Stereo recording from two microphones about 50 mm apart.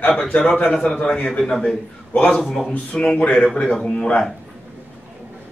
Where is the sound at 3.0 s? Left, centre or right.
Left.